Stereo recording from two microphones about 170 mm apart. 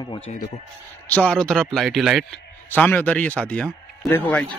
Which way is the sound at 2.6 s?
10° left (ahead or behind).